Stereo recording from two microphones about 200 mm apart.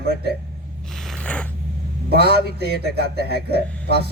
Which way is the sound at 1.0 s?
5° left (ahead or behind).